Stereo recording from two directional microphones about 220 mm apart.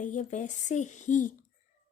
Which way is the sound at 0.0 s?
35° left (ahead or behind).